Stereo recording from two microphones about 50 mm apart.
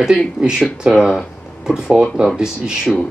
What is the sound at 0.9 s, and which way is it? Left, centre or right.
Speech, centre.